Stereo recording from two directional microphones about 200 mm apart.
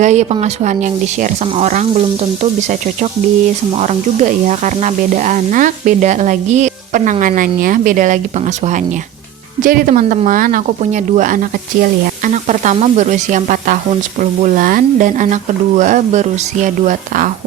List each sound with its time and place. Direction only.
0.0 s speech: 35° right (ahead or behind)